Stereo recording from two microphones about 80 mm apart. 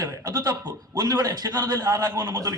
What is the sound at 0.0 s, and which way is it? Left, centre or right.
A man's voice, right.